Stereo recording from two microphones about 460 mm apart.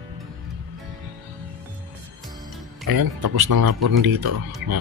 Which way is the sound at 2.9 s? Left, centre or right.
Right.